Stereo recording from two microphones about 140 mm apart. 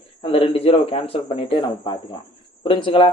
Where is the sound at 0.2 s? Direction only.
40° left (ahead or behind).